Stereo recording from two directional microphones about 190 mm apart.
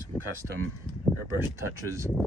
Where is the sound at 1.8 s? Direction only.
15° right (ahead or behind).